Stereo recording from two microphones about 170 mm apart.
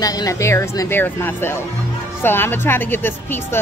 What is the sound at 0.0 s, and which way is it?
A woman's voice, 20° left (ahead or behind).